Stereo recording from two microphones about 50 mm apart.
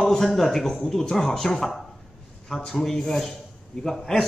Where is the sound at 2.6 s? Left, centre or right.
Centre.